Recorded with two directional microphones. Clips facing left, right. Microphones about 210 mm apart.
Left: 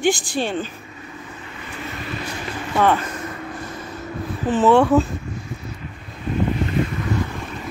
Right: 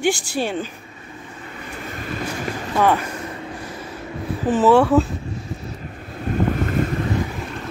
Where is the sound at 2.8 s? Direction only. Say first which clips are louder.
Even; 10° right (ahead or behind).